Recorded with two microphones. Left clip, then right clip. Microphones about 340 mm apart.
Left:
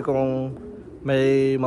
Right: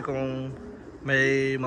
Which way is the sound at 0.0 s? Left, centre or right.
Centre.